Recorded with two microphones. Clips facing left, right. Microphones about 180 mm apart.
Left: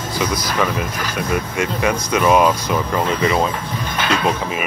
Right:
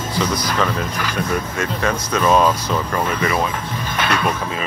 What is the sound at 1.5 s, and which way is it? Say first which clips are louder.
Speech: left 2 dB; 15° left (ahead or behind).